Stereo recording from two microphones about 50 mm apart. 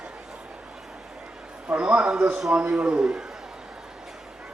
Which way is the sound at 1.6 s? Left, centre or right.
Right.